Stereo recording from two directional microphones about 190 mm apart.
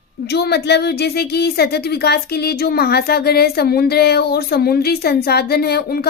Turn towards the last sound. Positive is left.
turn(degrees=55)  # may be behind; listen again after turning